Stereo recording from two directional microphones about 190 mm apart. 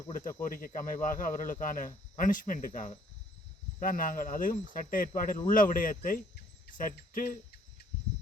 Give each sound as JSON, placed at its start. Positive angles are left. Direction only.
{"t": 0.4, "sound": "speech", "side_deg": 45}